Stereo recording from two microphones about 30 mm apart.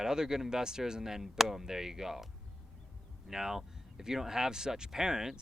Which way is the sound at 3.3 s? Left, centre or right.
Centre.